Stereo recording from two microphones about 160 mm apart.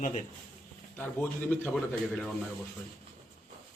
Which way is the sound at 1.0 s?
15° left (ahead or behind).